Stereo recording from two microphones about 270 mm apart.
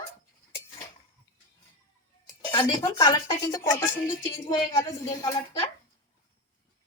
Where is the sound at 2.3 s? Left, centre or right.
Centre.